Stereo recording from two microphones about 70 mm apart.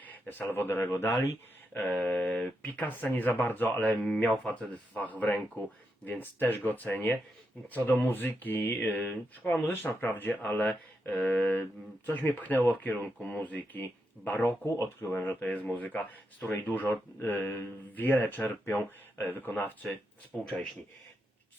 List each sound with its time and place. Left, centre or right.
0.0 s speech: left
2.0 s speech: centre
4.0 s speech: centre
4.9 s speech: left
14.3 s speech: left
15.2 s speech: left
20.3 s speech: centre